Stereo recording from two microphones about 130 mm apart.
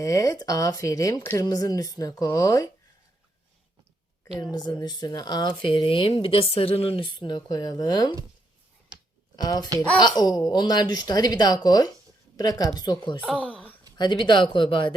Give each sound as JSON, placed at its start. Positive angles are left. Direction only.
{"t": 0.0, "sound": "speech", "side_deg": 25}
{"t": 4.5, "sound": "speech", "side_deg": 30}
{"t": 9.3, "sound": "speech", "side_deg": 30}
{"t": 13.2, "sound": "speech", "side_deg": 10}
{"t": 13.9, "sound": "speech", "side_deg": 35}